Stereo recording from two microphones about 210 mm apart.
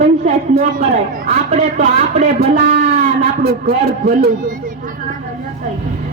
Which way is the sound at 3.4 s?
50° right (ahead or behind).